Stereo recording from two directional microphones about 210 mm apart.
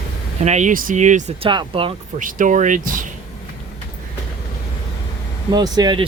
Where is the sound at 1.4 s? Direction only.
25° right (ahead or behind).